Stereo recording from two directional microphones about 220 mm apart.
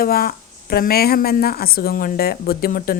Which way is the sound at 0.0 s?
45° left (ahead or behind).